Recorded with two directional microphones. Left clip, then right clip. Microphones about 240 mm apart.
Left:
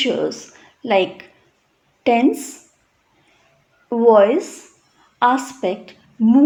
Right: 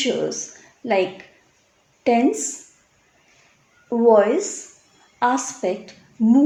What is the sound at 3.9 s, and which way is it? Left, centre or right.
Speech, left.